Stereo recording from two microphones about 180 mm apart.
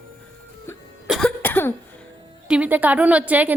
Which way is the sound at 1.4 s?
10° left (ahead or behind).